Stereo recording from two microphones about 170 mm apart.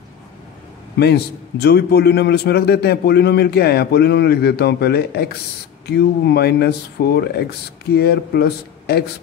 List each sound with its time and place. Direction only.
0.9 s a man's voice: 75° left (ahead or behind)